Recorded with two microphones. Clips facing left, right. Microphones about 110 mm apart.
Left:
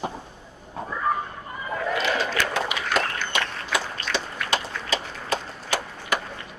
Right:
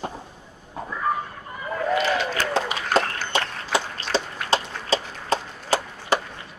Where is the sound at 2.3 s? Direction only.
35° right (ahead or behind).